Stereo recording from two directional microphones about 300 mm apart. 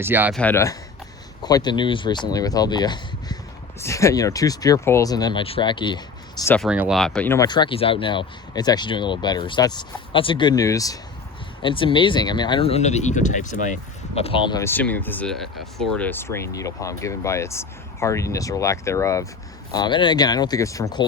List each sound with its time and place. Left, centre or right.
0.0 s speech: centre
6.6 s speech: centre